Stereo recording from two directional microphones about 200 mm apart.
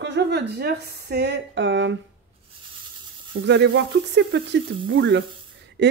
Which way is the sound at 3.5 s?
60° right (ahead or behind).